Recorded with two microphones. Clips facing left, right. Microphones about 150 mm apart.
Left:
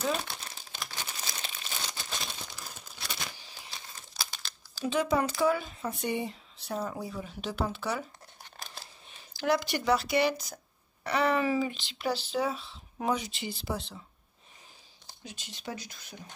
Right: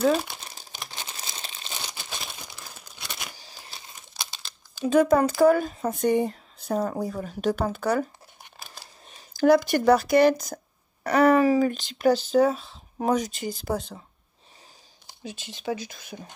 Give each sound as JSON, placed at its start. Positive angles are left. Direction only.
{"t": 0.1, "sound": "speech", "side_deg": 0}
{"t": 0.7, "sound": "crumpling", "side_deg": -20}
{"t": 2.0, "sound": "crumpling", "side_deg": 0}
{"t": 3.3, "sound": "a sound", "side_deg": -35}
{"t": 4.8, "sound": "speech", "side_deg": -45}
{"t": 9.1, "sound": "speech", "side_deg": -50}
{"t": 15.0, "sound": "speech", "side_deg": -55}